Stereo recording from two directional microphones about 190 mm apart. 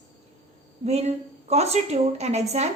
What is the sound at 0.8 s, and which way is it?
A woman's voice, 35° right (ahead or behind).